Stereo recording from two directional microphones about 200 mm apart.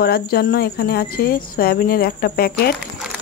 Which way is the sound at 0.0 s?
50° left (ahead or behind).